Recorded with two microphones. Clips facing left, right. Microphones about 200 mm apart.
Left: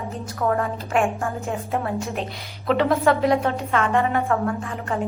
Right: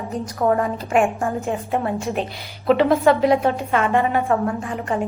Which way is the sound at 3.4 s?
15° right (ahead or behind).